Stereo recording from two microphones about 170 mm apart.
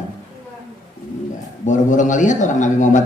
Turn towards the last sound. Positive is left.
turn(degrees=45)  # may be behind; listen again after turning